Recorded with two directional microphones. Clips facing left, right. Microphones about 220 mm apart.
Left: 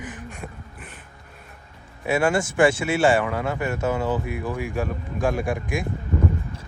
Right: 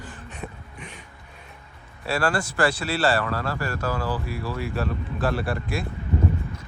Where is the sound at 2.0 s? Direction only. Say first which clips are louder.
Left 4 dB; 20° left (ahead or behind).